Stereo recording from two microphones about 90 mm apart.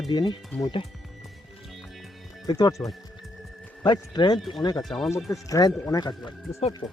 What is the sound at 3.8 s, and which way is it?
Speech, 55° left (ahead or behind).